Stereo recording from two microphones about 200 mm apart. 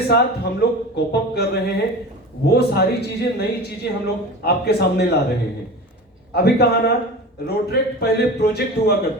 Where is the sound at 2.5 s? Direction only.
55° left (ahead or behind).